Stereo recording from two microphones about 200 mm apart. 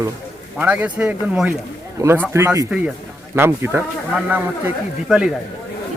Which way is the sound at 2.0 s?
15° right (ahead or behind).